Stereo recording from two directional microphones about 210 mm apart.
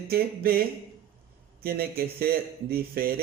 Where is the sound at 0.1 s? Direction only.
45° right (ahead or behind).